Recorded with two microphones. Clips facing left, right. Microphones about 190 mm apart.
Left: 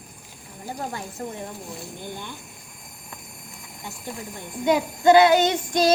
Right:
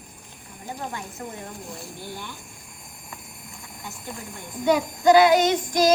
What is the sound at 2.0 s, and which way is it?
Child singing, 20° left (ahead or behind).